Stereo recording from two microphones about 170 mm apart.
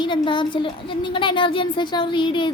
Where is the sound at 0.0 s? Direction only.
30° left (ahead or behind).